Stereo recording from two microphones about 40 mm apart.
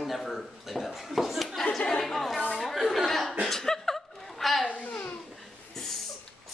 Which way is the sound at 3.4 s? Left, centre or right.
Centre.